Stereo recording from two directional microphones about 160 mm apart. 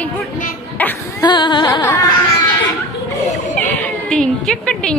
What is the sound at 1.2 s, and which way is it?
Carnatic music, 30° left (ahead or behind).